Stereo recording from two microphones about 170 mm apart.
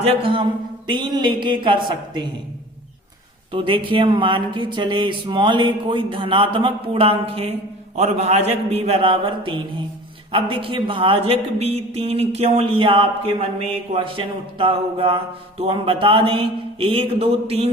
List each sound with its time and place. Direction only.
0.0 s speech: 35° right (ahead or behind)
3.5 s speech: 30° right (ahead or behind)